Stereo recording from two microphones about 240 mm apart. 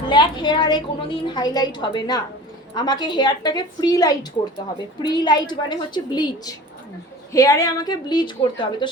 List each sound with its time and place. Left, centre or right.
0.1 s a woman's voice: centre